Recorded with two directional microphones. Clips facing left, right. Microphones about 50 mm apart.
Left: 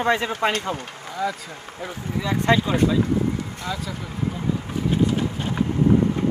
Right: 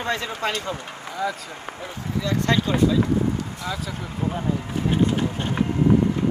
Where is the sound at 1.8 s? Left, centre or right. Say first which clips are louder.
Left 1 dB; centre.